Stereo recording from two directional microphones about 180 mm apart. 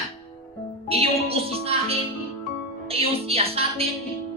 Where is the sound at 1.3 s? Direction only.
35° right (ahead or behind).